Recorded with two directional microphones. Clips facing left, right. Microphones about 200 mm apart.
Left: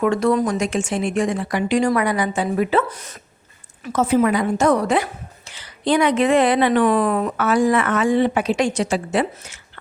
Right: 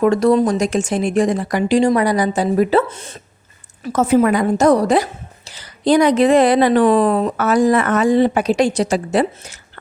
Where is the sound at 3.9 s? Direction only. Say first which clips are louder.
Right 3 dB; 45° right (ahead or behind).